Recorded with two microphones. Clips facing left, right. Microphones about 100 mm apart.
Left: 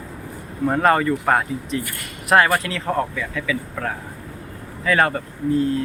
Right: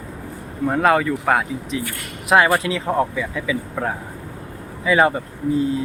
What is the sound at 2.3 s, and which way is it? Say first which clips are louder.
Speech: right 1 dB; 15° right (ahead or behind).